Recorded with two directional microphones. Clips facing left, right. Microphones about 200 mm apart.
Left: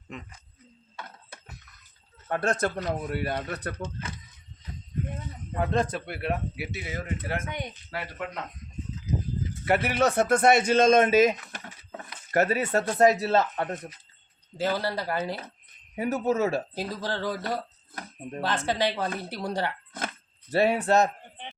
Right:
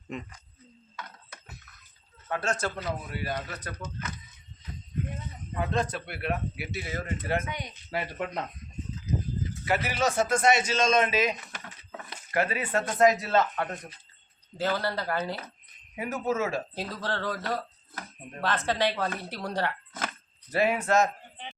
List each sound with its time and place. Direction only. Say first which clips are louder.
2.2 s a man's voice: left 4 dB; 50° left (ahead or behind)
3.8 s speech: left 3 dB; 30° left (ahead or behind)
5.5 s a man's voice: left 3 dB; 50° left (ahead or behind)
6.2 s speech: even; 25° left (ahead or behind)
7.4 s a man's voice: left 2 dB; 50° left (ahead or behind)
7.9 s speech: right 4 dB; 15° right (ahead or behind)
9.6 s a man's voice: left 4 dB; 55° left (ahead or behind); by 13.7 s 30° left (ahead or behind)
14.6 s speech: left 1 dB; 10° left (ahead or behind)
16.0 s speech: left 4 dB; 35° left (ahead or behind)
16.7 s speech: left 2 dB; 10° left (ahead or behind)
20.5 s speech: left 3 dB; 30° left (ahead or behind)